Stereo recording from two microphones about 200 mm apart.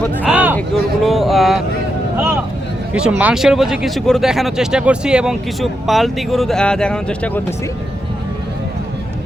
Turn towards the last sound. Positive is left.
turn(degrees=5)  # may be behind; listen again after turning